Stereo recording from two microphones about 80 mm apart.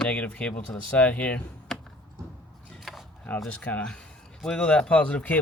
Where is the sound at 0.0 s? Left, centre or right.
Centre.